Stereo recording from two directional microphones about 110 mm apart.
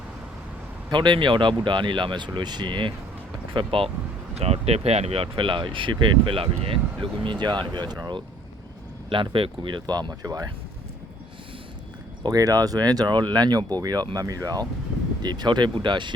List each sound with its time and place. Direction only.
0.9 s speech: 45° right (ahead or behind)
4.4 s speech: 70° right (ahead or behind); by 8.2 s 40° right (ahead or behind)
9.3 s speech: 50° right (ahead or behind); by 10.5 s 35° right (ahead or behind)
12.2 s speech: 35° right (ahead or behind)